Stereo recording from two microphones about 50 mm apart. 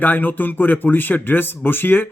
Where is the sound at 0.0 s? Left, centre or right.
Left.